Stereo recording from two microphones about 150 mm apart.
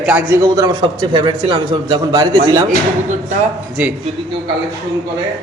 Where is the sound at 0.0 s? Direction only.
10° right (ahead or behind).